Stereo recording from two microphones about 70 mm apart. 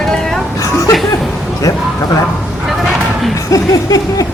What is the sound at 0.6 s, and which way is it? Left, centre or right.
Speech, left.